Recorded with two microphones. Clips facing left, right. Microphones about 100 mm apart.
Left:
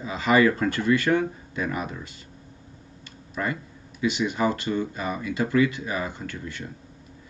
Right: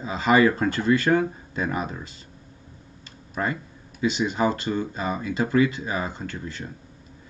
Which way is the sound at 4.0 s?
30° right (ahead or behind).